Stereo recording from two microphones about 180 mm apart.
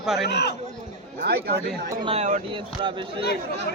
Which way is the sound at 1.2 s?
60° right (ahead or behind).